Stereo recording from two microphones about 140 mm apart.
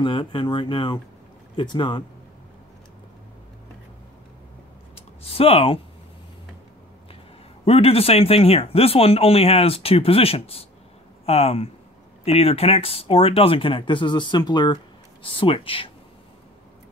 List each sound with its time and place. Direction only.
0.0 s speech: 35° left (ahead or behind)
5.2 s speech: 45° left (ahead or behind)
7.6 s speech: 45° left (ahead or behind)